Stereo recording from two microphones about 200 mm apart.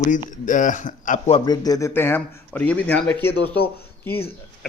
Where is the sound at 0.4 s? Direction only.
40° left (ahead or behind).